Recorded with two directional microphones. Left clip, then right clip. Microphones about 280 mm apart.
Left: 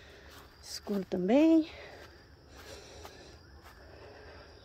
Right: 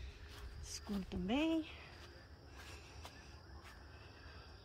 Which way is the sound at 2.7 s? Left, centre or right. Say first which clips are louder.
Left 8 dB; centre.